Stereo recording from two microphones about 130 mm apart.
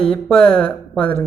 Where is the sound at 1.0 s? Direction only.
45° left (ahead or behind).